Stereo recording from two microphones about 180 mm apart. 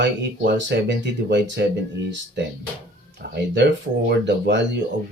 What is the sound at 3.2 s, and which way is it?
Speech, 70° right (ahead or behind).